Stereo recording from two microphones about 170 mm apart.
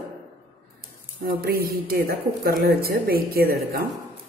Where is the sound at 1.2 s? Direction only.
65° right (ahead or behind).